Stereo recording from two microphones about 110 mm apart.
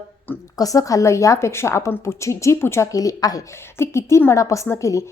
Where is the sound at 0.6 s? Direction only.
30° left (ahead or behind).